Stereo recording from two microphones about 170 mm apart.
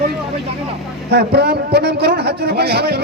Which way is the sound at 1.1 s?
75° right (ahead or behind).